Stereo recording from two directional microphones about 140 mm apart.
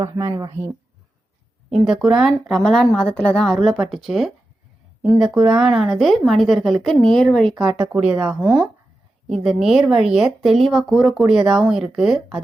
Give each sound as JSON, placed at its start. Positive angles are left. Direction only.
{"t": 0.0, "sound": "speech", "side_deg": -25}
{"t": 1.7, "sound": "speech", "side_deg": 0}
{"t": 5.4, "sound": "speech", "side_deg": -5}
{"t": 7.6, "sound": "speech", "side_deg": -5}